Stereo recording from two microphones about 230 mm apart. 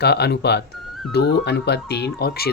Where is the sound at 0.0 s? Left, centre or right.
Left.